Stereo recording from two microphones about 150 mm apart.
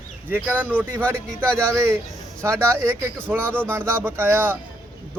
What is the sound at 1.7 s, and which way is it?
Speech, 15° right (ahead or behind).